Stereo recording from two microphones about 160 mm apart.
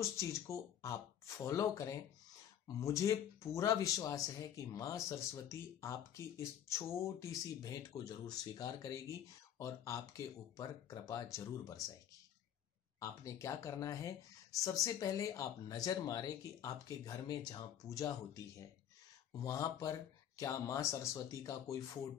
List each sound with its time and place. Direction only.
0.0 s speech: 20° left (ahead or behind)
13.0 s speech: 20° left (ahead or behind)
19.4 s speech: 20° left (ahead or behind)